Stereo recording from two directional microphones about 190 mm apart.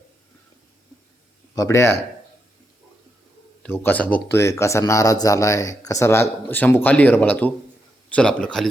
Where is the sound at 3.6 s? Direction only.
10° left (ahead or behind).